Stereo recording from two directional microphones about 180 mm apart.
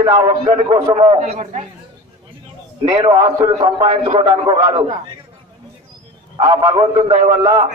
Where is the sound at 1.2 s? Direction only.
40° right (ahead or behind).